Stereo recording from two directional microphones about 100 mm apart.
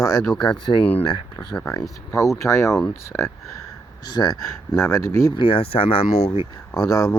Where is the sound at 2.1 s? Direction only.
30° left (ahead or behind).